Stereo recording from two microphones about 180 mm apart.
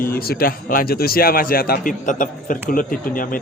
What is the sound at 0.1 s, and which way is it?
A man's voice, 55° left (ahead or behind).